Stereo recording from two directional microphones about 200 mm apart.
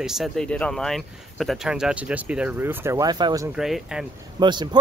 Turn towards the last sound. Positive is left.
turn(degrees=-20)  # may be behind; listen again after turning